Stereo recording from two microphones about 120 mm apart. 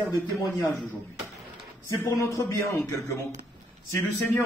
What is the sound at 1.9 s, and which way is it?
Speech, 25° left (ahead or behind).